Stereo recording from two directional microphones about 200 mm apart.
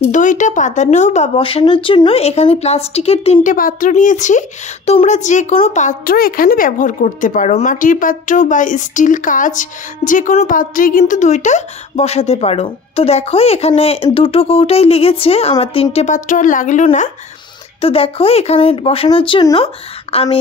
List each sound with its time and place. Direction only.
0.0 s a woman's voice: 40° left (ahead or behind)
3.5 s a woman's voice: 45° left (ahead or behind)